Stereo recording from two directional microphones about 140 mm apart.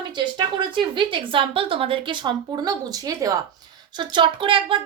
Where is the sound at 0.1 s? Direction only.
35° right (ahead or behind).